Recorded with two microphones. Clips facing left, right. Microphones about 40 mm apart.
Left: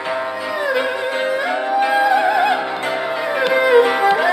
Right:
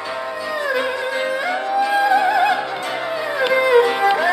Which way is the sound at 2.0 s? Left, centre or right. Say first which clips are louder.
Right 1 dB; centre.